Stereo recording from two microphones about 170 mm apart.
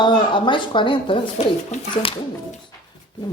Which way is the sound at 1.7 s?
40° left (ahead or behind).